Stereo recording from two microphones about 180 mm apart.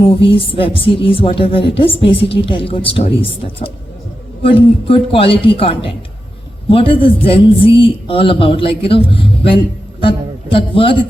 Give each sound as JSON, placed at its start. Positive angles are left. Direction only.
{"t": 0.0, "sound": "speech", "side_deg": 30}
{"t": 9.0, "sound": "a sound", "side_deg": 30}
{"t": 10.0, "sound": "a man's voice", "side_deg": 30}